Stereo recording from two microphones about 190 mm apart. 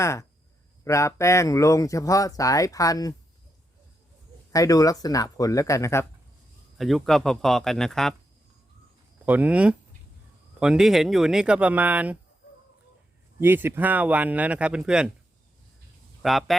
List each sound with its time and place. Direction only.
0.0 s speech: 15° left (ahead or behind)
4.5 s speech: 20° left (ahead or behind)
6.7 s speech: centre (ahead or behind)
9.2 s speech: 10° right (ahead or behind)
13.4 s speech: 10° right (ahead or behind)
16.2 s speech: centre (ahead or behind)